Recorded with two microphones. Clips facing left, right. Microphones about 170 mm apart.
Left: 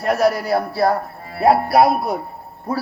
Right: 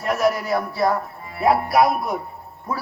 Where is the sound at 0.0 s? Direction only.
35° left (ahead or behind).